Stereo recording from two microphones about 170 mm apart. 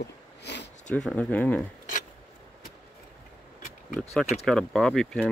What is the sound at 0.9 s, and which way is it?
Speech, 5° left (ahead or behind).